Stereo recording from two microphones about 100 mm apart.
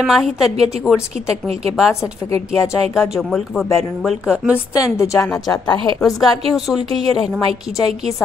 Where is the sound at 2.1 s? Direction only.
30° left (ahead or behind).